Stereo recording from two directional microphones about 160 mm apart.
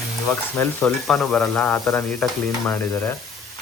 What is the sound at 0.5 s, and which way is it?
Speech, 15° left (ahead or behind).